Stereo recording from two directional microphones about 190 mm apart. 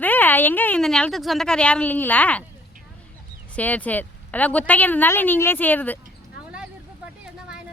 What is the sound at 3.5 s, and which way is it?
A woman's voice, 10° left (ahead or behind).